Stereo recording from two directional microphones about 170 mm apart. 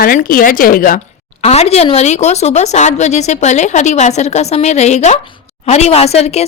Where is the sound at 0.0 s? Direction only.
55° left (ahead or behind).